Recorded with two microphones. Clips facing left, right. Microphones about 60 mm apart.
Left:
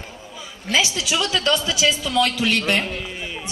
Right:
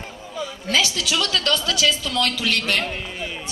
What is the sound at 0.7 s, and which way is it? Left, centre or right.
A woman's voice, centre.